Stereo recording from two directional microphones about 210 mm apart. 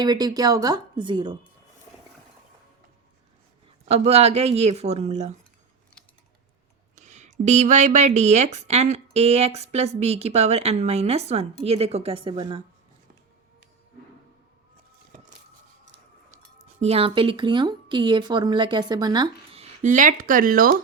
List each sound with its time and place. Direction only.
0.0 s speech: 20° right (ahead or behind)
3.8 s speech: 30° right (ahead or behind)
6.9 s speech: 35° right (ahead or behind)
16.8 s speech: 30° right (ahead or behind)
19.8 s speech: 40° right (ahead or behind)